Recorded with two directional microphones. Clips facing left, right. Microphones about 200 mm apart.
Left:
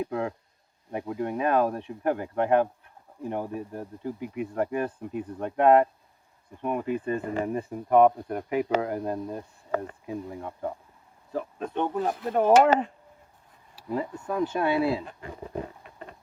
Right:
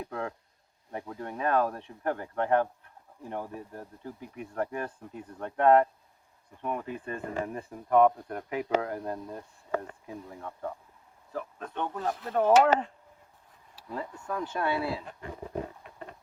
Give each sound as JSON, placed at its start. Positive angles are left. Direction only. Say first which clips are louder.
{"t": 0.0, "sound": "speech", "louder": "left 6 dB", "side_deg": 10}
{"t": 13.9, "sound": "speech", "louder": "left 6 dB", "side_deg": 15}